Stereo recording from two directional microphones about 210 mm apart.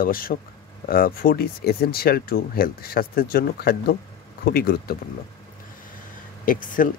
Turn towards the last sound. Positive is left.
turn(degrees=40)  # may be behind; listen again after turning